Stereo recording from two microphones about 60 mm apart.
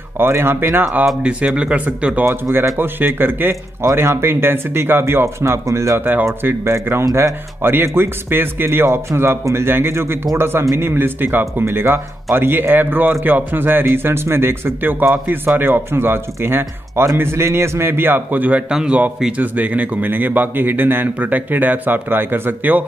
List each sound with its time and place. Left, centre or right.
0.2 s speech: right
1.2 s speech: centre
2.5 s speech: right
3.8 s speech: right
5.7 s speech: right
5.9 s speech: right
6.6 s speech: right
18.7 s speech: centre
19.3 s speech: right